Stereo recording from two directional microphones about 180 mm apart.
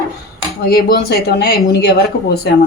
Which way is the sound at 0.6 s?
60° left (ahead or behind).